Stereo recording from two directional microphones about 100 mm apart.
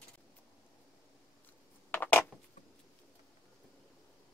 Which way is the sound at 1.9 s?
20° left (ahead or behind).